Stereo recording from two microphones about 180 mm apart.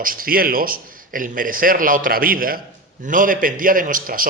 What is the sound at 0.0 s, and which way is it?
A man's voice, 50° right (ahead or behind).